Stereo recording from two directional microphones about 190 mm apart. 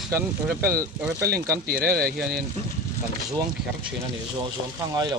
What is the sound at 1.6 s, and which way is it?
Speech, 50° right (ahead or behind).